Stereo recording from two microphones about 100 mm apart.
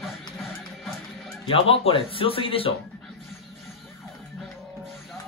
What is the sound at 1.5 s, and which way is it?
Speech, 65° left (ahead or behind).